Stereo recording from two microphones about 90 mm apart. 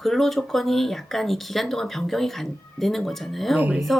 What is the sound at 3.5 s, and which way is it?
Speech, 15° right (ahead or behind).